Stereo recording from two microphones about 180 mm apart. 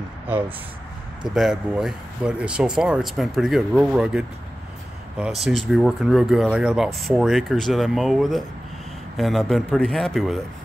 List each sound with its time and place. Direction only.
1.3 s speech: 5° right (ahead or behind)